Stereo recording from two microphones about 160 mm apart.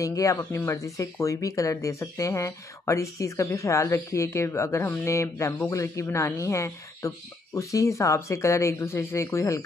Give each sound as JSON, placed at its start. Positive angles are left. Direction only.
{"t": 0.0, "sound": "speech", "side_deg": 20}